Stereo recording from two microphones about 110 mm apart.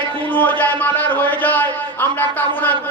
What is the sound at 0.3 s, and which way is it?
Speech, 15° left (ahead or behind).